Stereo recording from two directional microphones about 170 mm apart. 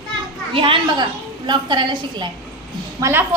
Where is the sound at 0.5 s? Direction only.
30° right (ahead or behind).